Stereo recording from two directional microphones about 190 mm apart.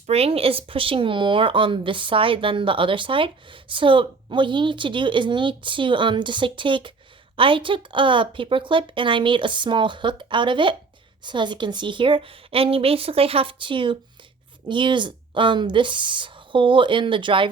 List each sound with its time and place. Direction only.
0.1 s speech: 30° right (ahead or behind)